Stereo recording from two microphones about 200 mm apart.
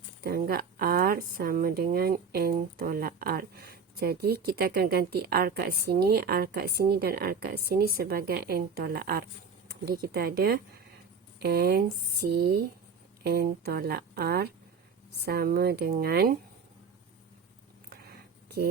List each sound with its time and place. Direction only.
0.2 s speech: 50° right (ahead or behind)